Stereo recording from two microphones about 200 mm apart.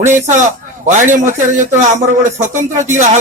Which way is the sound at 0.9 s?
40° right (ahead or behind).